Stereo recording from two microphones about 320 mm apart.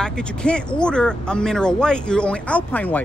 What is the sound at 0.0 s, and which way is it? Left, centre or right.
Speech, centre.